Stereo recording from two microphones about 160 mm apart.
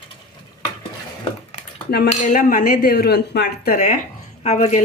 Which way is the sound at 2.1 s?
55° left (ahead or behind).